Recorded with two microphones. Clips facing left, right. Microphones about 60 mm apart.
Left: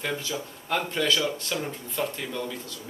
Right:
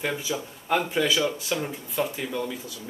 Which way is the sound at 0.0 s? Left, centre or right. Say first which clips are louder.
Right 2 dB; centre.